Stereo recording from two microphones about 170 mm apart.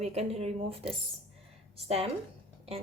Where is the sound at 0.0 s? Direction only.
40° right (ahead or behind).